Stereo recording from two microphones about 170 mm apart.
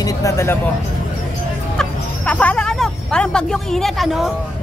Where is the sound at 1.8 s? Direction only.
10° left (ahead or behind).